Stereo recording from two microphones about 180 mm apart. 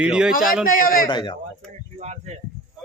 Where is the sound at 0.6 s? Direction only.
50° left (ahead or behind).